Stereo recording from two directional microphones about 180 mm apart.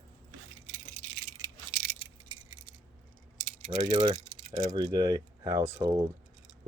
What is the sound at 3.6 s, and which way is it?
Speech, 35° right (ahead or behind).